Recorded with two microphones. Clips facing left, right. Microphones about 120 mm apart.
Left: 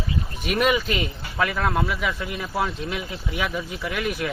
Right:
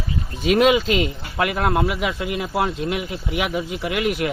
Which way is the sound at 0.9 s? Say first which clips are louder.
Right 6 dB; 85° right.